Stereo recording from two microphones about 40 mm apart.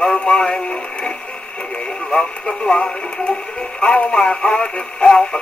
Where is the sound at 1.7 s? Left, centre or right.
Left.